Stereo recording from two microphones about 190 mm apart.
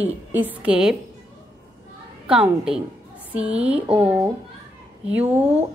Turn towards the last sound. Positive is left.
turn(degrees=-10)  # may be behind; listen again after turning